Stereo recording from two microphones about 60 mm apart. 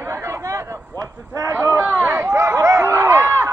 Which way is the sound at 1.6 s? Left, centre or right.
Right.